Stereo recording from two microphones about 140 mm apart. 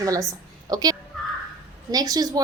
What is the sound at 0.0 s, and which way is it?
A woman's voice, 25° right (ahead or behind).